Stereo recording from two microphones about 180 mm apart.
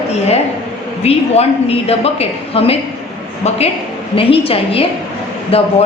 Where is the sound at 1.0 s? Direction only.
35° left (ahead or behind).